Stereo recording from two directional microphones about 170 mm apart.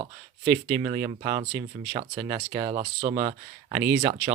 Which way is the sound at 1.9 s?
30° right (ahead or behind).